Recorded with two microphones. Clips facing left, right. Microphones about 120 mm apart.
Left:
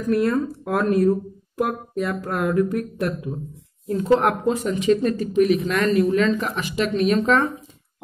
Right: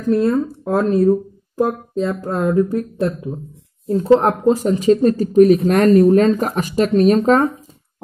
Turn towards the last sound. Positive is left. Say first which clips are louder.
# right 6 dB
turn(degrees=-40)  # may be behind; listen again after turning